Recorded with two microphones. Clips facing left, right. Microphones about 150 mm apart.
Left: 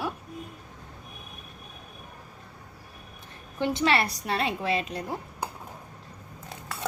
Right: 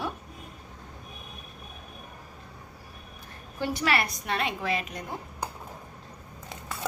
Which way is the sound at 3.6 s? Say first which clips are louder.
Left 3 dB; 25° left (ahead or behind).